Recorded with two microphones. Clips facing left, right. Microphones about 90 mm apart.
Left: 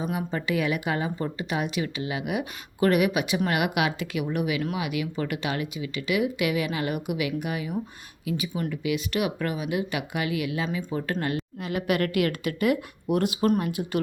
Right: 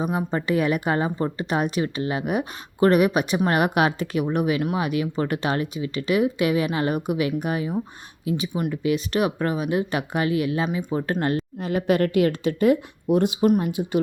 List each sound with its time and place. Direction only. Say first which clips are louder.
0.0 s a woman's voice: right 4 dB; 30° right (ahead or behind)